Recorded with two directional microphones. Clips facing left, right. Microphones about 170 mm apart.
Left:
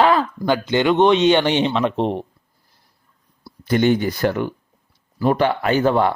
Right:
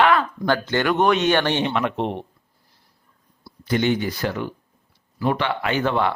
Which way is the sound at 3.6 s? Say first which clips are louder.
Left 4 dB; 45° left (ahead or behind).